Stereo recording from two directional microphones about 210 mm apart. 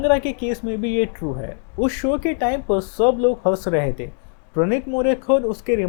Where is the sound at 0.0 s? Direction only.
15° left (ahead or behind).